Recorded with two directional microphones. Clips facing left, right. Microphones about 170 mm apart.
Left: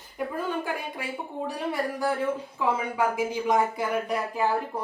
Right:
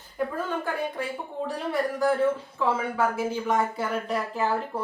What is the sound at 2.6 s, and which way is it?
Speech, 15° left (ahead or behind).